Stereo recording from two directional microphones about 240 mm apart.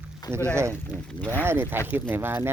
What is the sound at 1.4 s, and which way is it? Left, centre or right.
Speech, centre.